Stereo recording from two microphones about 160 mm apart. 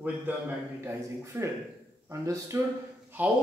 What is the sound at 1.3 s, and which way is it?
Speech, 20° right (ahead or behind).